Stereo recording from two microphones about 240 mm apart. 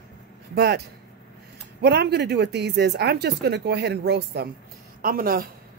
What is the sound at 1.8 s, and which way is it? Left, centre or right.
A woman's voice, right.